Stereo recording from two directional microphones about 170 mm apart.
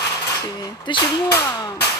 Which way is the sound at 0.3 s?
25° left (ahead or behind).